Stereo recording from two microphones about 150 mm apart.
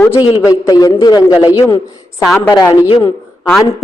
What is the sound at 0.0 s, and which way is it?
A man's voice, 15° left (ahead or behind).